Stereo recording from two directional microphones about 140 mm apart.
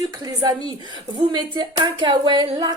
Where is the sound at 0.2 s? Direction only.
30° right (ahead or behind).